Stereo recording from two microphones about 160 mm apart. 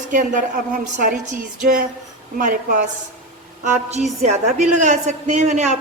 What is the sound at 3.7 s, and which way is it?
A woman's voice, 45° right (ahead or behind).